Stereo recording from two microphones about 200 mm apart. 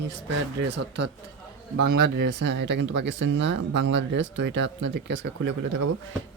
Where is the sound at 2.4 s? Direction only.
60° right (ahead or behind).